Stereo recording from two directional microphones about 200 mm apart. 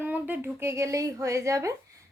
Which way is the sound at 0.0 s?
10° right (ahead or behind).